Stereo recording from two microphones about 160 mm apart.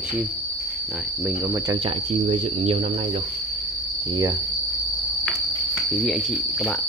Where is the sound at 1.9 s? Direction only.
40° right (ahead or behind).